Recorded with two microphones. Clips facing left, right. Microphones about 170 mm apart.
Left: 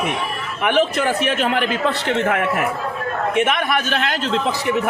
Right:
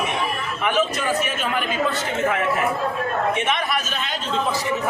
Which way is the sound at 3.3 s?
60° left (ahead or behind).